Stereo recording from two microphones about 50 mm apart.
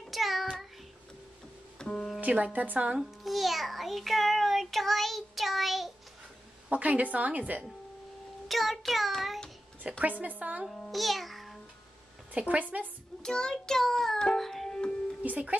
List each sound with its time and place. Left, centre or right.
0.1 s child singing: centre
1.8 s music: left
2.1 s a woman's voice: right
3.0 s a child's voice: centre
6.7 s a woman's voice: right
8.5 s child singing: centre
9.8 s a woman's voice: right
10.7 s a child's voice: centre
12.4 s a woman's voice: right
13.2 s child singing: centre
14.7 s music: centre
15.2 s speech: right